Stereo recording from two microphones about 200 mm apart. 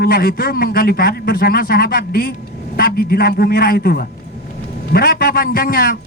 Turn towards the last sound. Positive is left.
turn(degrees=45)  # may be behind; listen again after turning